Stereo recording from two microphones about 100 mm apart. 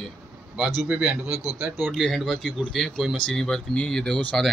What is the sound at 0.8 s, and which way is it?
Speech, 10° right (ahead or behind).